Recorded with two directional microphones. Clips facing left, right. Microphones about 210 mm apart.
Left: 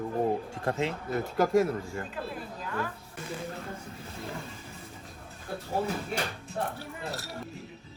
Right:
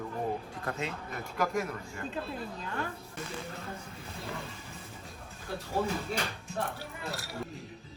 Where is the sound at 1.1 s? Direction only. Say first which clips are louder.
Left 6 dB; 40° left (ahead or behind).